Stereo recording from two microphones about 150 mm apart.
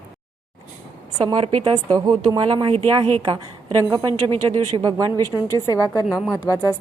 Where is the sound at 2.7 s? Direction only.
40° right (ahead or behind).